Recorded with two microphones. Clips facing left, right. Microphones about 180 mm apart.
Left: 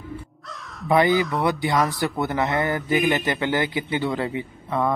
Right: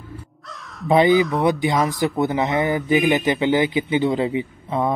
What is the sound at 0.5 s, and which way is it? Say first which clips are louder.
Crow: right 2 dB; centre (ahead or behind).